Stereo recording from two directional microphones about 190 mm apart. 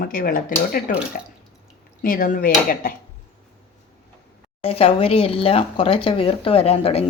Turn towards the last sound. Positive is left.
turn(degrees=30)  # may be behind; listen again after turning